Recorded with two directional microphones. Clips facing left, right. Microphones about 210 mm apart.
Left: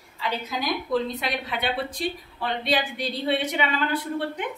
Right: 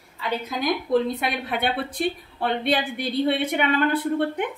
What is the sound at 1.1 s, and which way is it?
A woman's voice, 55° right (ahead or behind).